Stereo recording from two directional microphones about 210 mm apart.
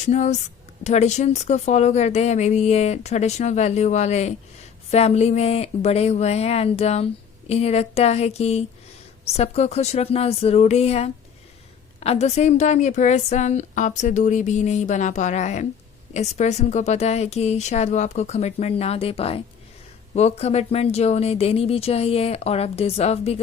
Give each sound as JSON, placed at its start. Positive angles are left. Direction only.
{"t": 0.0, "sound": "a woman's voice", "side_deg": 35}